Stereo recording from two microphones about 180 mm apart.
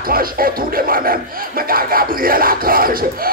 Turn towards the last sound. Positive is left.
turn(degrees=-55)  # may be behind; listen again after turning